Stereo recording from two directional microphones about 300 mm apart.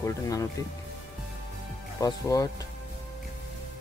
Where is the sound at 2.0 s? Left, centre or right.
Centre.